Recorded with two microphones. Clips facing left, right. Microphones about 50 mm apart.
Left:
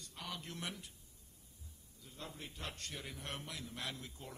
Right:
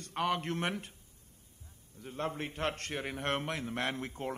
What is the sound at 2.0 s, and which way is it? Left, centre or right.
A man's voice, right.